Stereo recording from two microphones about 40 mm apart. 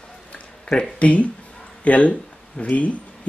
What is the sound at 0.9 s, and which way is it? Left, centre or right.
Speech, left.